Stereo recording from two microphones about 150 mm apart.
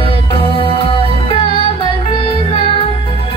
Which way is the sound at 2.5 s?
40° left (ahead or behind).